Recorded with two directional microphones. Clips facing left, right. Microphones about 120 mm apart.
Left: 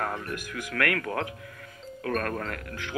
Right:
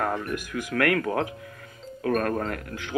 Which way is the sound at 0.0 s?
25° right (ahead or behind).